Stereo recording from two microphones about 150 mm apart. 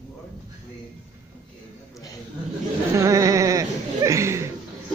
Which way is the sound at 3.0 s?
20° right (ahead or behind).